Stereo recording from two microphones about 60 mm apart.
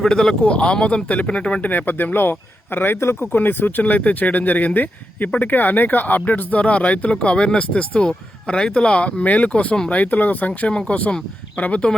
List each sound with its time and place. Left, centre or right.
0.0 s speech: centre
1.7 s a man's voice: left
3.3 s speech: left